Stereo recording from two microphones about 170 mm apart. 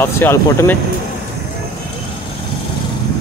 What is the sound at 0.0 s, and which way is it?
Speech, 15° left (ahead or behind).